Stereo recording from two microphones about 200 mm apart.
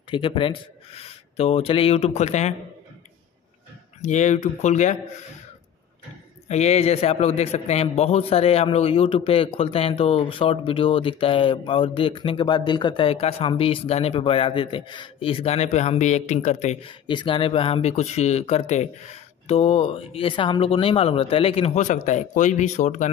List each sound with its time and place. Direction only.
0.1 s a man's voice: 25° left (ahead or behind)
4.0 s speech: 35° left (ahead or behind)
6.5 s a man's voice: 35° left (ahead or behind)